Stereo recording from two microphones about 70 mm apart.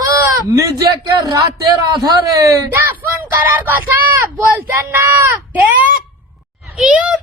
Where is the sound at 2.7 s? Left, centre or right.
Right.